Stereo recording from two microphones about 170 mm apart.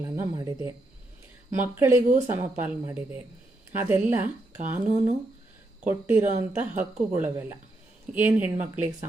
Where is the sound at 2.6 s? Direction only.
10° right (ahead or behind).